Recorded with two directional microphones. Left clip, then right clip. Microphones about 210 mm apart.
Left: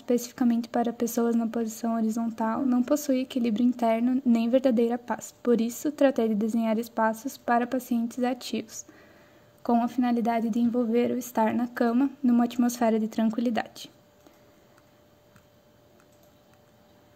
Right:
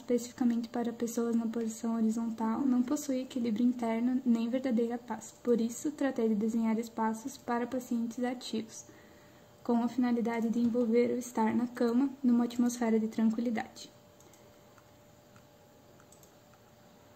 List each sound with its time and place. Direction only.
0.0 s speech: 40° left (ahead or behind)